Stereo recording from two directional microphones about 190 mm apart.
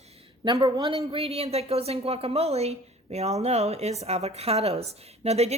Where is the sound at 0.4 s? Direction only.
25° right (ahead or behind).